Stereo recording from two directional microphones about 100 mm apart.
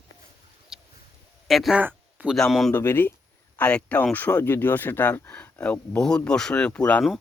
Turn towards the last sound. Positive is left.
turn(degrees=10)  # may be behind; listen again after turning